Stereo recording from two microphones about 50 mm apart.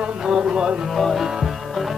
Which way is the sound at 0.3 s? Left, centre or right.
Centre.